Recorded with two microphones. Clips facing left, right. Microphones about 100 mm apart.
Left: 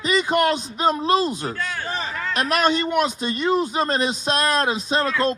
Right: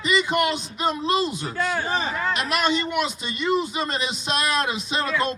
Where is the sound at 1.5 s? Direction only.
10° right (ahead or behind).